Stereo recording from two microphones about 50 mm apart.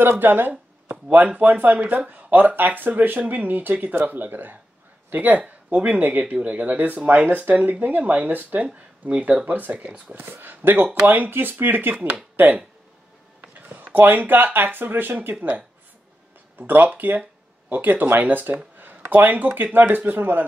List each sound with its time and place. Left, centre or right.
0.0 s a sound: right
1.1 s speech: right
10.1 s speech: right
13.5 s speech: right
16.5 s speech: right